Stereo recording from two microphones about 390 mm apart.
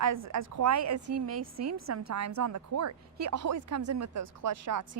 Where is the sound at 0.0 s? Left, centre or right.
Right.